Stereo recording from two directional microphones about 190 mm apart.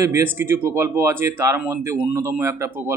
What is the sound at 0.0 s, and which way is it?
A man's voice, 10° right (ahead or behind).